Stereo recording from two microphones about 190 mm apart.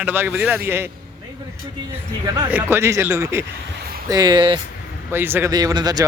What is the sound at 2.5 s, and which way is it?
Speech, 10° right (ahead or behind).